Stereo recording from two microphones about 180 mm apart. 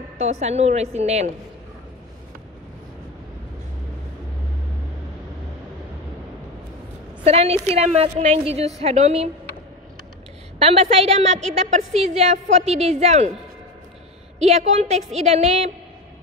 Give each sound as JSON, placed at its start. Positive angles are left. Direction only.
{"t": 0.2, "sound": "a woman's voice", "side_deg": -40}
{"t": 7.2, "sound": "a woman's voice", "side_deg": -35}
{"t": 10.6, "sound": "a woman's voice", "side_deg": -35}
{"t": 14.4, "sound": "a woman's voice", "side_deg": -40}